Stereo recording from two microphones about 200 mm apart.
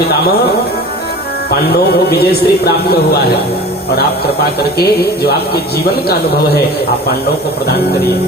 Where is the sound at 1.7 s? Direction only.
55° left (ahead or behind).